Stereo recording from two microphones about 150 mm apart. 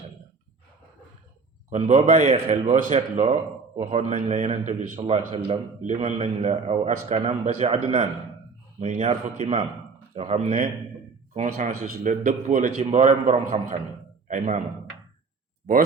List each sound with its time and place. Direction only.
1.7 s a man's voice: 50° right (ahead or behind)
4.9 s a man's voice: 45° right (ahead or behind)